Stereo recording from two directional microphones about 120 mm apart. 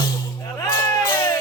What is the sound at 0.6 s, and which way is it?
Music, 25° left (ahead or behind).